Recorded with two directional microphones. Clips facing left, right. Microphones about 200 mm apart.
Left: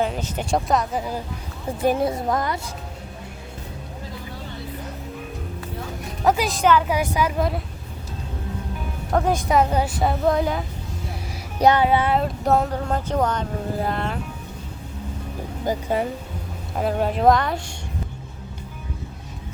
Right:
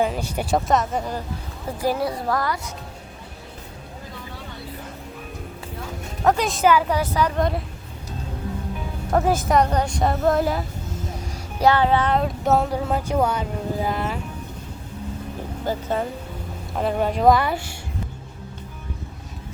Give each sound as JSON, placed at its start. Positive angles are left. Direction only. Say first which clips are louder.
{"t": 0.0, "sound": "speech", "louder": "right 1 dB", "side_deg": -5}
{"t": 1.8, "sound": "speech", "louder": "left 3 dB", "side_deg": 20}
{"t": 6.2, "sound": "speech", "louder": "right 1 dB", "side_deg": 0}
{"t": 6.8, "sound": "speech", "louder": "even", "side_deg": 15}
{"t": 9.0, "sound": "speech", "louder": "right 1 dB", "side_deg": -5}
{"t": 11.6, "sound": "speech", "louder": "left 1 dB", "side_deg": 15}
{"t": 15.6, "sound": "speech", "louder": "left 2 dB", "side_deg": 15}
{"t": 16.7, "sound": "speech", "louder": "even", "side_deg": 0}